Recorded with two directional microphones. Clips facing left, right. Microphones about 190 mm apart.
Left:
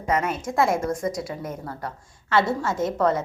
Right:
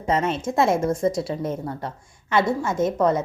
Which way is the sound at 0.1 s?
25° right (ahead or behind).